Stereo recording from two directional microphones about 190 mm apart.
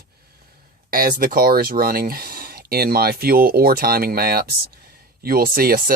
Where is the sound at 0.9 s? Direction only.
50° right (ahead or behind).